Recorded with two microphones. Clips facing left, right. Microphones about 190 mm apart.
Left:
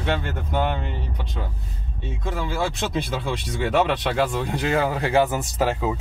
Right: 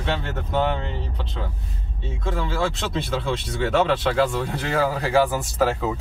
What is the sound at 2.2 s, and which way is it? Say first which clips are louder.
Speech: right 1 dB; 15° left (ahead or behind).